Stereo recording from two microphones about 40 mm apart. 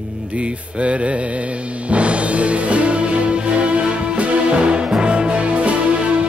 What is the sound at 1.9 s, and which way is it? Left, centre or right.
Music, right.